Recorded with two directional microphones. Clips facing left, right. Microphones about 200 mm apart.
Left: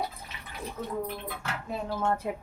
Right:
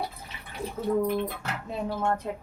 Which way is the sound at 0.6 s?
30° right (ahead or behind).